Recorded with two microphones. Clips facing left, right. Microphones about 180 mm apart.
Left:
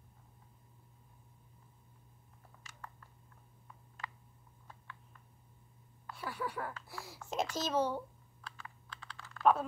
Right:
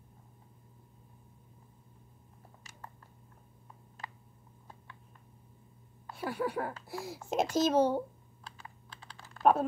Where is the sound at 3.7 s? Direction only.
30° right (ahead or behind).